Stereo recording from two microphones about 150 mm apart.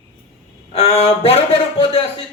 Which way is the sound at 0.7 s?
45° left (ahead or behind).